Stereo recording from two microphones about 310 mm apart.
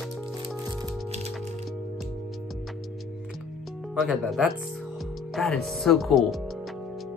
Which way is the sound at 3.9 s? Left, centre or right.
Centre.